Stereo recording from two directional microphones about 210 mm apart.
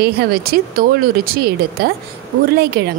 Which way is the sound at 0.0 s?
45° right (ahead or behind).